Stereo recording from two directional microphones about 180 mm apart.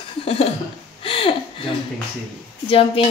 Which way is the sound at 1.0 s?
30° left (ahead or behind).